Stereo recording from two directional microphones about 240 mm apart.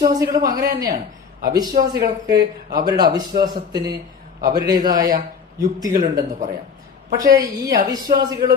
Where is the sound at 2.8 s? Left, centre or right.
Centre.